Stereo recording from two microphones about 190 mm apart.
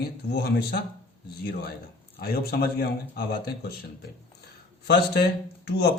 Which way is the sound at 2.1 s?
55° left (ahead or behind).